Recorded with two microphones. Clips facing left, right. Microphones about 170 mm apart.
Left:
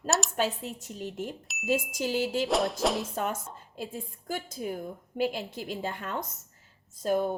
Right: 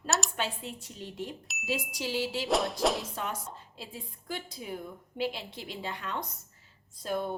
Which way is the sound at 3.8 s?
45° left (ahead or behind).